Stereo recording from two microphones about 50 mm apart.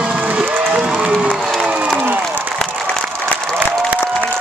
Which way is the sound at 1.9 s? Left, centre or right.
Right.